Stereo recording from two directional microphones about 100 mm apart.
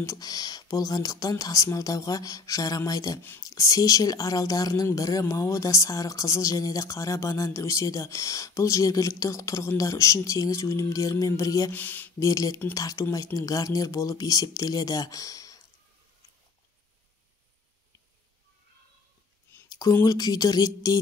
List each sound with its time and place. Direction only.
0.0 s speech: 35° left (ahead or behind)
3.2 s speech: 25° left (ahead or behind)
3.4 s speech: 35° left (ahead or behind)
11.7 s speech: 20° left (ahead or behind)
12.2 s speech: 35° left (ahead or behind)
19.5 s a sound: 25° left (ahead or behind)
19.9 s speech: 30° left (ahead or behind)